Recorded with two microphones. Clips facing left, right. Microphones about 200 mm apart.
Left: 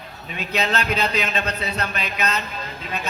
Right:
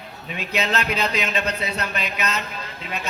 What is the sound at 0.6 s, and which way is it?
A man's voice, 35° left (ahead or behind).